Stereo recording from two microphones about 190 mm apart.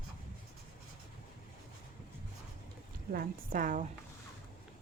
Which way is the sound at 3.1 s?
50° right (ahead or behind).